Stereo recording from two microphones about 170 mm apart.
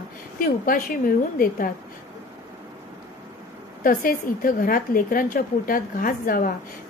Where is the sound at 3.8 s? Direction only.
55° left (ahead or behind).